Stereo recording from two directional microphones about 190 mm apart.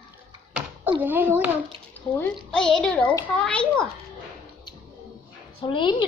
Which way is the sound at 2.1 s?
5° left (ahead or behind).